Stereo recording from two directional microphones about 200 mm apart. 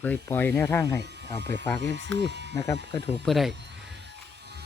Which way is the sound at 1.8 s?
60° right (ahead or behind).